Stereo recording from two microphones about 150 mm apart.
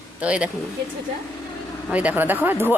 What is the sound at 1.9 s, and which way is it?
Speech, 10° right (ahead or behind).